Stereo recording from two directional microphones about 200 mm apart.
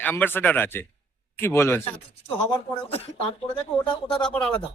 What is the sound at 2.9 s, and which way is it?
Speech, 30° left (ahead or behind).